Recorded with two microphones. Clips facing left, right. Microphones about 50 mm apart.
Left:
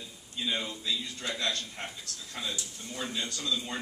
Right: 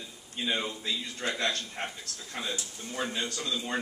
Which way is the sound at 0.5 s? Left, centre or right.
Right.